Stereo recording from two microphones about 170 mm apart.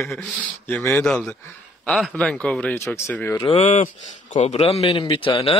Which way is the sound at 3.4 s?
35° left (ahead or behind).